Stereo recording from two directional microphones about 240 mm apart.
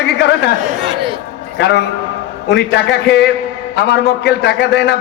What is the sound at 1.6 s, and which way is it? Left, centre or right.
A man's voice, left.